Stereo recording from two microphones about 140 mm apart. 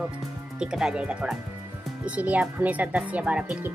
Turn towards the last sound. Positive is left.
turn(degrees=-10)  # may be behind; listen again after turning